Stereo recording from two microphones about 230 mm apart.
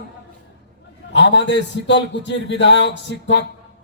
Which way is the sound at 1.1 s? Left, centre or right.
Left.